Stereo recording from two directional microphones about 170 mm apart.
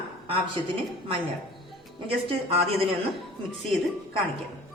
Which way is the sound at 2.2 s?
40° right (ahead or behind).